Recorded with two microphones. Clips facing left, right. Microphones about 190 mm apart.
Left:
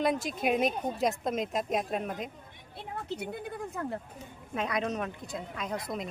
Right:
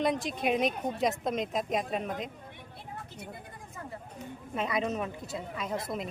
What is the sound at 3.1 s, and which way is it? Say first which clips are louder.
Speech: left 9 dB; 75° left (ahead or behind).